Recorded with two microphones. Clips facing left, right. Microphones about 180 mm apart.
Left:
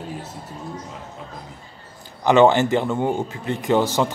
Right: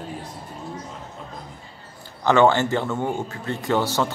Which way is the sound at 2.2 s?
15° left (ahead or behind).